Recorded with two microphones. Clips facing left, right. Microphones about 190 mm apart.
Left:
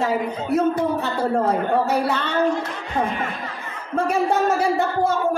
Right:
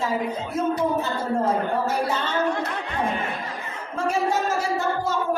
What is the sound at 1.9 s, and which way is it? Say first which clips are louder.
Speech: left 3 dB; 65° left (ahead or behind).